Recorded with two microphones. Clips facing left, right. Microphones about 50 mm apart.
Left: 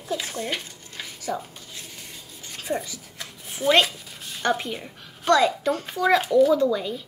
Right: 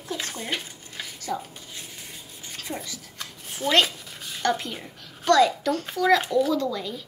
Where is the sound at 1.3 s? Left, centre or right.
Left.